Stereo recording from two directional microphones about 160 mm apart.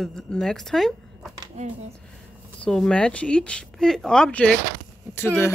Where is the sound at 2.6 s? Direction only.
5° left (ahead or behind).